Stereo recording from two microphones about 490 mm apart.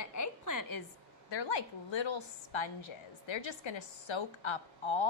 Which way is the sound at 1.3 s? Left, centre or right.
Left.